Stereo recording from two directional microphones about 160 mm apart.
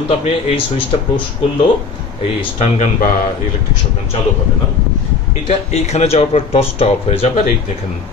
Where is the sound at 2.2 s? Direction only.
40° left (ahead or behind).